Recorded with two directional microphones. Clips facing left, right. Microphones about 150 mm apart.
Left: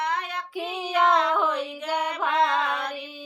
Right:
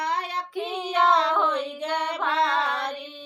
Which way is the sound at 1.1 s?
30° right (ahead or behind).